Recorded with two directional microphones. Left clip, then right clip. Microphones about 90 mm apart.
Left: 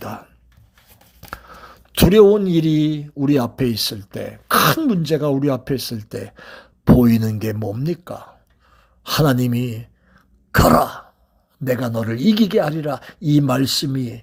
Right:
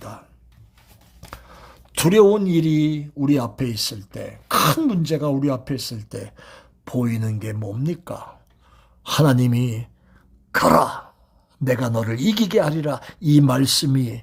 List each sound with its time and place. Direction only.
0.0 s writing: 50° left (ahead or behind)
1.2 s a sound: 25° left (ahead or behind)
2.0 s speech: centre (ahead or behind)
2.4 s speech: 20° left (ahead or behind)
7.0 s speech: 40° left (ahead or behind)
8.0 s speech: 5° right (ahead or behind)
8.7 s speech: 5° left (ahead or behind)
10.5 s cough: 5° left (ahead or behind)
11.6 s speech: centre (ahead or behind)